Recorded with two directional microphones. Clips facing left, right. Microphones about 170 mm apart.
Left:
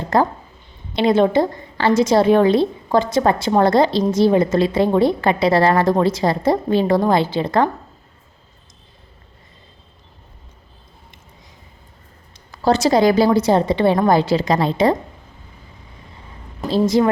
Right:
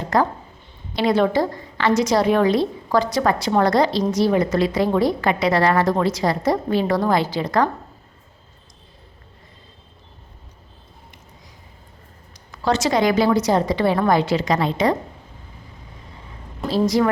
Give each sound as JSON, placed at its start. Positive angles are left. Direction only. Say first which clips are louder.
{"t": 0.1, "sound": "a woman's voice", "louder": "left 2 dB", "side_deg": 30}
{"t": 12.5, "sound": "a woman's voice", "louder": "left 4 dB", "side_deg": 35}
{"t": 16.6, "sound": "a woman's voice", "louder": "left 2 dB", "side_deg": -5}
{"t": 16.8, "sound": "a woman's voice", "louder": "left 2 dB", "side_deg": 25}